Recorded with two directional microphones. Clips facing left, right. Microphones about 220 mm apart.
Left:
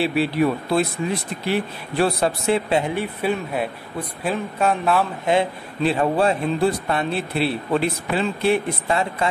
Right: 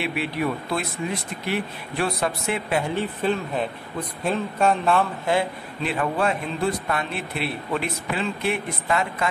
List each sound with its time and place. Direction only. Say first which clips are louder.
0.0 s a man's voice: left 6 dB; 30° left (ahead or behind)
2.8 s a man's voice: left 1 dB; 10° left (ahead or behind)
5.2 s a man's voice: left 3 dB; 20° left (ahead or behind)